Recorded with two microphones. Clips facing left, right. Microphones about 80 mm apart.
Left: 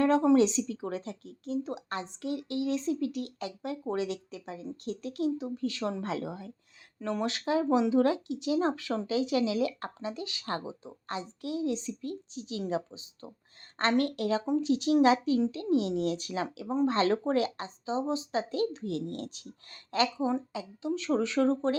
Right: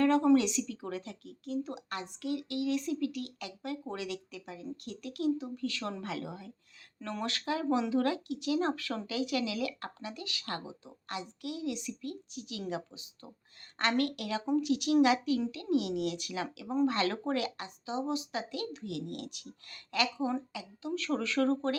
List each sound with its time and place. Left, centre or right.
0.0 s speech: left